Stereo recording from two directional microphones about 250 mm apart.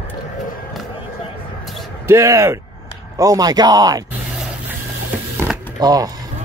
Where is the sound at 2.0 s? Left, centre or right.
Centre.